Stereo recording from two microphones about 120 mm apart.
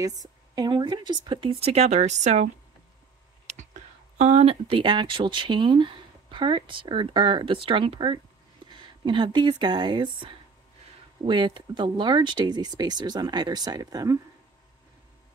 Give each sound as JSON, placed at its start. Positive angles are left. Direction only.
{"t": 0.0, "sound": "speech", "side_deg": -30}
{"t": 3.4, "sound": "speech", "side_deg": -75}